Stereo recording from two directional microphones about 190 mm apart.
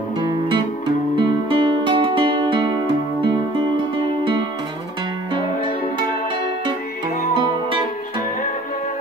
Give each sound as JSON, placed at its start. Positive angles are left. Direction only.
{"t": 1.1, "sound": "music", "side_deg": -25}